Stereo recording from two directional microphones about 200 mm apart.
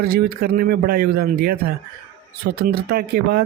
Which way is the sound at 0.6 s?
50° right (ahead or behind).